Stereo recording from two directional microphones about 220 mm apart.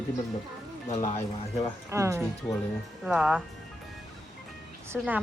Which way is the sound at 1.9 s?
15° right (ahead or behind).